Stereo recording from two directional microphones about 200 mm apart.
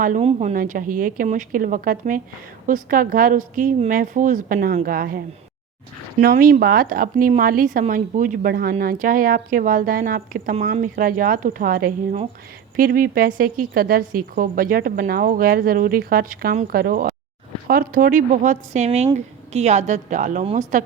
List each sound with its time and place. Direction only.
0.0 s a woman's voice: 35° right (ahead or behind)